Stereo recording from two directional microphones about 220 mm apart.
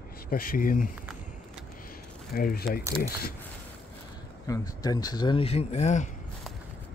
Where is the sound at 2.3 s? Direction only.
45° left (ahead or behind).